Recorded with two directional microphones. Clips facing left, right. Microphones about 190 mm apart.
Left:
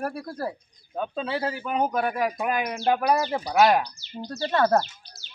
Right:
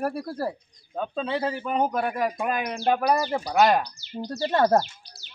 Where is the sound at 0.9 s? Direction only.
5° left (ahead or behind).